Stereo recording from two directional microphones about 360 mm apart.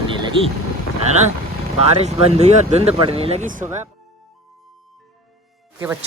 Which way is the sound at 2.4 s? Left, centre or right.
Centre.